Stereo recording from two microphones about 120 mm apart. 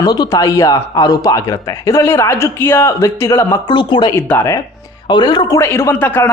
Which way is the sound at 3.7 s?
40° left (ahead or behind).